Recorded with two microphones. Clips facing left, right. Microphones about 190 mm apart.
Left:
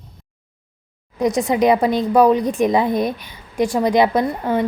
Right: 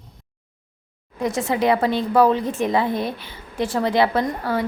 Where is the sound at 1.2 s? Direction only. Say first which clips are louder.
Left 5 dB; 15° left (ahead or behind).